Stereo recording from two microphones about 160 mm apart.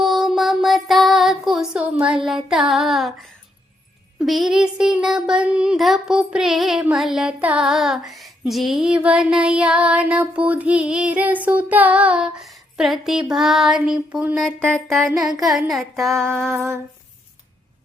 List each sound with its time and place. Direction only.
0.0 s a sound: centre (ahead or behind)
2.2 s child singing: 5° right (ahead or behind)
16.5 s humming: 15° right (ahead or behind)